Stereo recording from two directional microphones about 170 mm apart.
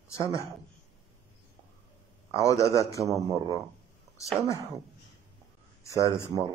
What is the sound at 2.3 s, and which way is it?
Speech, 20° left (ahead or behind).